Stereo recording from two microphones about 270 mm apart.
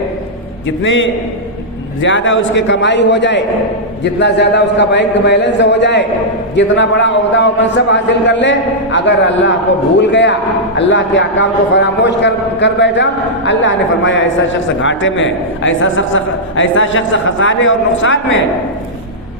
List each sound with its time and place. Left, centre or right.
0.8 s a man's voice: left